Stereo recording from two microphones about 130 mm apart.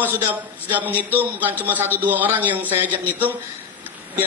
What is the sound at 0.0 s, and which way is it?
A man's voice, 15° right (ahead or behind).